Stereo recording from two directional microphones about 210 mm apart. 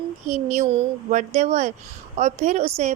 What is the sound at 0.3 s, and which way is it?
A woman's voice, 35° right (ahead or behind).